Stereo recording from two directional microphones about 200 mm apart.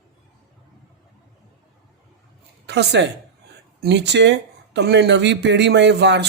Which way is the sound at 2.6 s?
60° right (ahead or behind).